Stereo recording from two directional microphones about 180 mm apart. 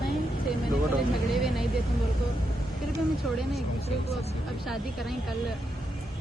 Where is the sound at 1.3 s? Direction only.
Centre (ahead or behind).